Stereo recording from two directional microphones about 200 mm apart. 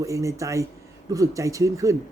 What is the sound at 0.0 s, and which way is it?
Speech, 15° right (ahead or behind).